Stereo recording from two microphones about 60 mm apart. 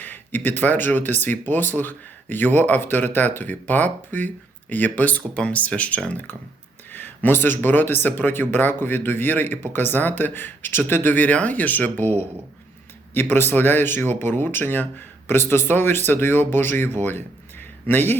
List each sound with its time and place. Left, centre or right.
0.0 s speech: left
6.9 s speech: left
13.1 s speech: left